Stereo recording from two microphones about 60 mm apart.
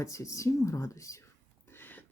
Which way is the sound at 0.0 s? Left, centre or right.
Left.